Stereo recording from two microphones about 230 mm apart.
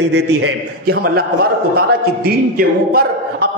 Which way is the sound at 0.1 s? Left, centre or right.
Right.